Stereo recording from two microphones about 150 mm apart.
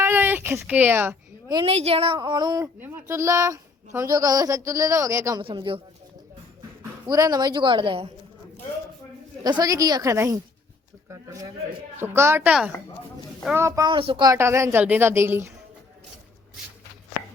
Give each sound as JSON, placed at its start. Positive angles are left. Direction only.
{"t": 0.0, "sound": "a sound", "side_deg": -15}
{"t": 0.6, "sound": "a woman's voice", "side_deg": -10}
{"t": 1.6, "sound": "speech", "side_deg": -40}
{"t": 2.7, "sound": "speech", "side_deg": -15}
{"t": 5.4, "sound": "speech", "side_deg": -35}
{"t": 7.1, "sound": "speech", "side_deg": -25}
{"t": 9.4, "sound": "a woman's voice", "side_deg": -30}
{"t": 13.9, "sound": "speech", "side_deg": -35}
{"t": 14.3, "sound": "a woman's voice", "side_deg": -20}